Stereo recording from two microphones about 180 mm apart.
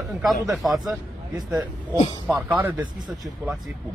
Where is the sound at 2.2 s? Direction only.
5° right (ahead or behind).